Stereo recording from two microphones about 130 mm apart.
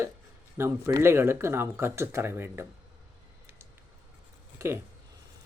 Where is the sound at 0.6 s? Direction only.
20° right (ahead or behind).